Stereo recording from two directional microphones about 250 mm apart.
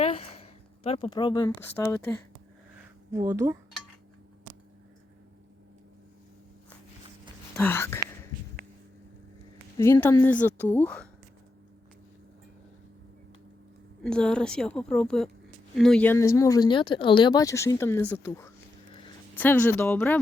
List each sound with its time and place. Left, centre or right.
0.0 s a sound: left
0.9 s speech: left
3.1 s speech: centre
7.5 s speech: centre
9.7 s speech: centre
14.0 s a woman's voice: centre